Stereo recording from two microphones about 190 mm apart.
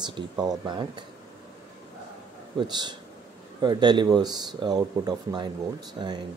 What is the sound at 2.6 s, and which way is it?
Speech, 20° right (ahead or behind).